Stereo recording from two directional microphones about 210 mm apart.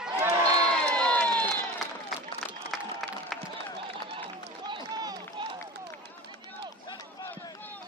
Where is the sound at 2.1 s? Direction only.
Centre (ahead or behind).